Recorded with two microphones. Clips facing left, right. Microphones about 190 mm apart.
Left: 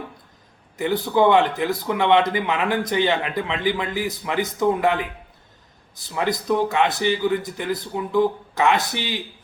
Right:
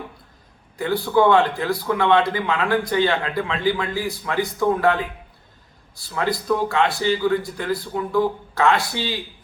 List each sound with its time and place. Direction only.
0.8 s a man's voice: 20° left (ahead or behind)